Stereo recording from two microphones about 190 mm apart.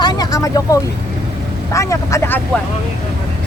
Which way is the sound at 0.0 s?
20° left (ahead or behind).